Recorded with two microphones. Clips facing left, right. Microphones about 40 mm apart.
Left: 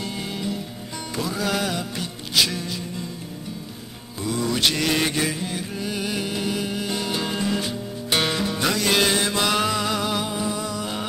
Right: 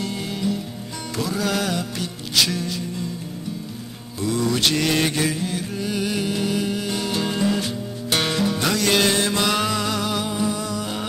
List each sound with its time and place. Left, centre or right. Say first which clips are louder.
0.0 s music: right 3 dB; centre
4.2 s mantra: right 2 dB; centre